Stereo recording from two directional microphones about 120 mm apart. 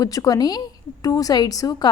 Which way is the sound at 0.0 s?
30° left (ahead or behind).